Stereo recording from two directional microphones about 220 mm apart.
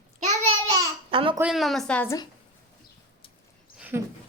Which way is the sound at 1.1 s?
25° right (ahead or behind).